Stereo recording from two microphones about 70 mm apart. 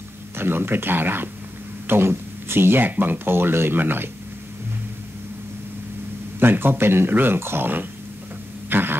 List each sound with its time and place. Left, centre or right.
0.4 s speech: right
6.4 s speech: right
8.6 s throat clearing: right